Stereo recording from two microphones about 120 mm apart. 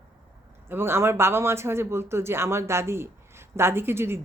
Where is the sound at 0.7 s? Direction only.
20° right (ahead or behind).